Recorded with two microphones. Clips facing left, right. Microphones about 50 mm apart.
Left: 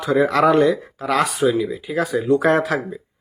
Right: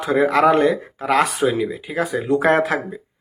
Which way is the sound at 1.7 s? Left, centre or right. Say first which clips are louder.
Left 1 dB; right.